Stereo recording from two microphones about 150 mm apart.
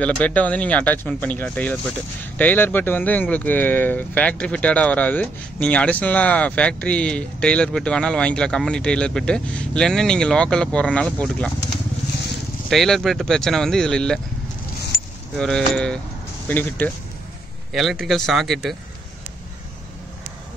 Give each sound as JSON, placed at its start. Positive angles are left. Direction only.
{"t": 0.0, "sound": "speech", "side_deg": 10}
{"t": 12.6, "sound": "speech", "side_deg": 0}
{"t": 15.3, "sound": "speech", "side_deg": 5}
{"t": 17.7, "sound": "speech", "side_deg": 0}